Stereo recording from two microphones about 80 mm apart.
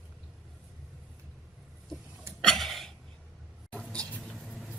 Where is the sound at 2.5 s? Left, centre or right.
Centre.